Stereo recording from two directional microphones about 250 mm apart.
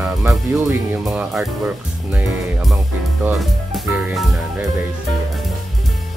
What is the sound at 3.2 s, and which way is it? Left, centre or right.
Music, centre.